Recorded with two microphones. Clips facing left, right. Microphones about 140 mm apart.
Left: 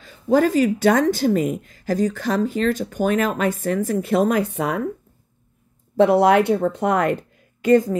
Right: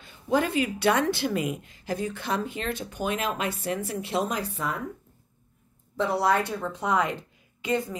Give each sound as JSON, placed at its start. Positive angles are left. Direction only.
{"t": 0.3, "sound": "a woman's voice", "side_deg": 40}
{"t": 5.9, "sound": "speech", "side_deg": 70}